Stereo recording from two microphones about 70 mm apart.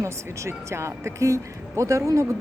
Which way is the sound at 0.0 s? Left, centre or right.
Right.